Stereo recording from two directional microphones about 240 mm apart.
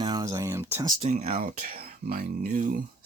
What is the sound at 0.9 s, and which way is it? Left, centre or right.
Speech, right.